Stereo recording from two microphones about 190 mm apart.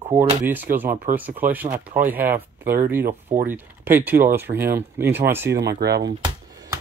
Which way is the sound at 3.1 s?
45° right (ahead or behind).